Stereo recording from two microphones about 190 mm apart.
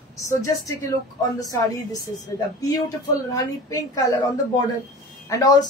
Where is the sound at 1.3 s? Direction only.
20° left (ahead or behind).